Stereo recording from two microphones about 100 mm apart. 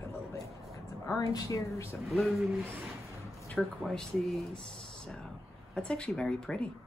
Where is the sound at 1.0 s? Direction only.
35° left (ahead or behind).